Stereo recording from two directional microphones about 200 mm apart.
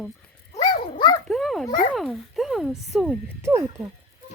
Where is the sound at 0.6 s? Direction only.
20° left (ahead or behind).